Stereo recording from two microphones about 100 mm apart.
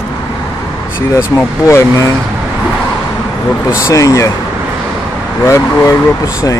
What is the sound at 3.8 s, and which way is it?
Speech, 30° left (ahead or behind).